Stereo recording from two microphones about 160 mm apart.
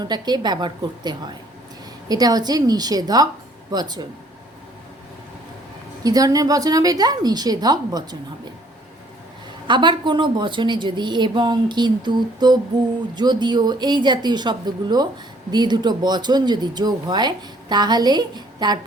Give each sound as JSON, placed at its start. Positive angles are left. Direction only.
{"t": 0.0, "sound": "speech", "side_deg": -25}
{"t": 6.0, "sound": "speech", "side_deg": -25}
{"t": 9.6, "sound": "speech", "side_deg": -30}